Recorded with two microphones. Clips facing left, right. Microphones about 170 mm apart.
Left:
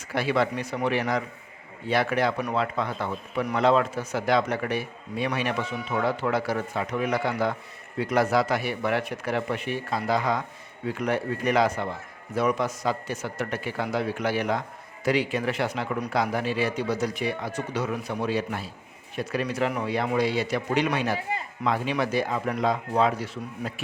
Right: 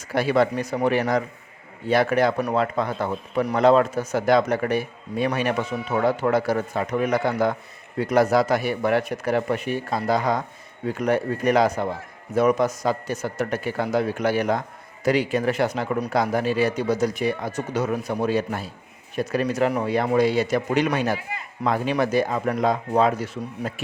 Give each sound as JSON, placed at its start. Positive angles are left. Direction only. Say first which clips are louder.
{"t": 0.1, "sound": "a man's voice", "louder": "right 4 dB", "side_deg": -40}